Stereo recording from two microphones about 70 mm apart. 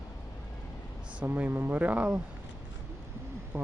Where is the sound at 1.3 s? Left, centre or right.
Right.